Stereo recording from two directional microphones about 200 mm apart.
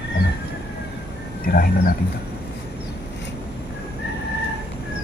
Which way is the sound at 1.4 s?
45° left (ahead or behind).